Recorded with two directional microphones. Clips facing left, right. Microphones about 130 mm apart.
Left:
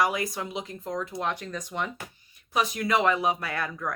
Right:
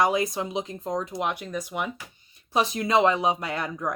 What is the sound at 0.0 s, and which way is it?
Speech, 20° right (ahead or behind).